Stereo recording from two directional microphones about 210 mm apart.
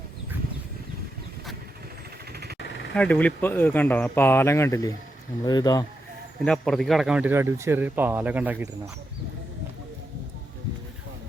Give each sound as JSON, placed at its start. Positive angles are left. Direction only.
{"t": 2.9, "sound": "speech", "side_deg": 5}
{"t": 6.4, "sound": "speech", "side_deg": 0}